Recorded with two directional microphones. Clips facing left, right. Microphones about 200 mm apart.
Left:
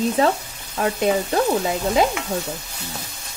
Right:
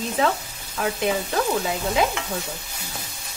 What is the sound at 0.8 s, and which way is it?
Frying, 40° left (ahead or behind).